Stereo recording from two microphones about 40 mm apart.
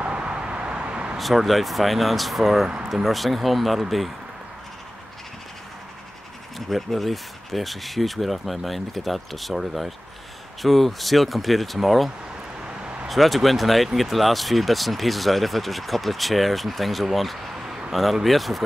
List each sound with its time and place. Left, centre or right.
0.0 s vehicle: right
1.1 s speech: centre
6.7 s speech: centre
12.6 s vehicle: right
13.1 s speech: centre
17.6 s a sound: right
18.2 s speech: centre